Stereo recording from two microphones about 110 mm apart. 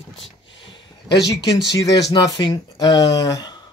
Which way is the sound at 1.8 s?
35° left (ahead or behind).